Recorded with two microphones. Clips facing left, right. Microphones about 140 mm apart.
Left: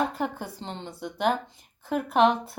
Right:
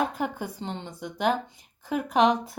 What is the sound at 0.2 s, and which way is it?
A woman's voice, 5° right (ahead or behind).